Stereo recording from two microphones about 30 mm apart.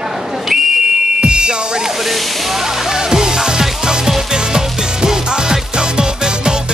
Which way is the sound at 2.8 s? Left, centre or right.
Centre.